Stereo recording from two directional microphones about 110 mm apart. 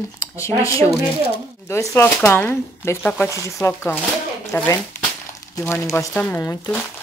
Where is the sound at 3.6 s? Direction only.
20° left (ahead or behind).